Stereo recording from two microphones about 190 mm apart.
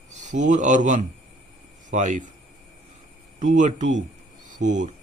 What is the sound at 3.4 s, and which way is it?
Speech, 40° right (ahead or behind).